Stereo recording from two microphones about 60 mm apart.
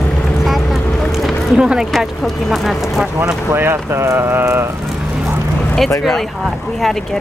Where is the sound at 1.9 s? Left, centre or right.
Centre.